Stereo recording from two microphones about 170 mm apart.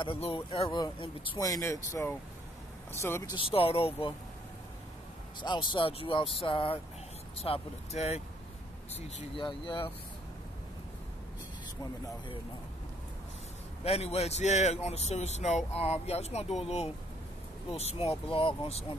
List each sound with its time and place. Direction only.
0.0 s speech: 30° left (ahead or behind); by 3.3 s 15° left (ahead or behind)
3.3 s speech: 35° left (ahead or behind)
5.4 s speech: 25° left (ahead or behind)
13.8 s speech: 35° left (ahead or behind)